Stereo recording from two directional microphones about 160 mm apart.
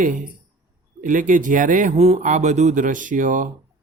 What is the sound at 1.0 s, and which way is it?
Speech, 55° right (ahead or behind).